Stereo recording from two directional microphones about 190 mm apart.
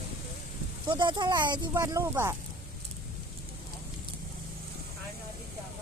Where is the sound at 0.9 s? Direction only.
25° right (ahead or behind).